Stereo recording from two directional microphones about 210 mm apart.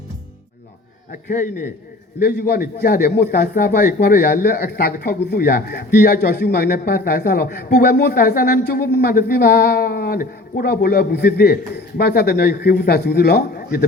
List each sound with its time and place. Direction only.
1.1 s a man's voice: 40° left (ahead or behind)